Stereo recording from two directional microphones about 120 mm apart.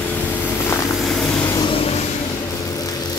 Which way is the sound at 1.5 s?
45° left (ahead or behind).